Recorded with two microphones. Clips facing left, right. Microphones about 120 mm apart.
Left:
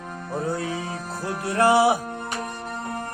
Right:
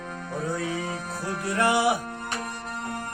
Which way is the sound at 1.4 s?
30° left (ahead or behind).